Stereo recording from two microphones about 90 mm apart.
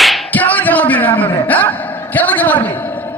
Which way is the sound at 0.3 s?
20° left (ahead or behind).